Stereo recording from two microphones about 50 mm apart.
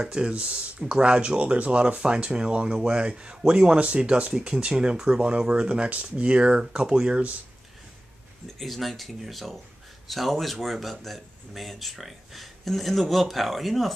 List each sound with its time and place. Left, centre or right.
0.0 s speech: centre
8.5 s speech: centre